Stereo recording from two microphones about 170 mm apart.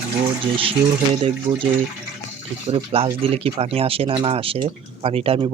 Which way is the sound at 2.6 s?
35° right (ahead or behind).